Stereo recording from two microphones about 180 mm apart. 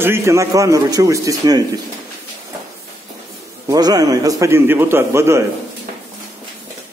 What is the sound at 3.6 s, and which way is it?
A man's voice, 20° right (ahead or behind).